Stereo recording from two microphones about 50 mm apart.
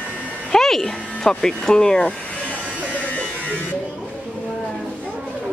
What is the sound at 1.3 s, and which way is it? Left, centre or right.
Speech, centre.